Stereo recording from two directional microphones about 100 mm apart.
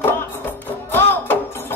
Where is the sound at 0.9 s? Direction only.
20° left (ahead or behind).